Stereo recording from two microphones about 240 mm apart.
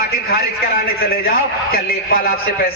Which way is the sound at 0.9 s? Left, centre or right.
Left.